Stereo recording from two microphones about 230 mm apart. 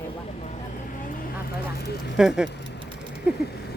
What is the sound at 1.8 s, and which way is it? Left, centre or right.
Speech, left.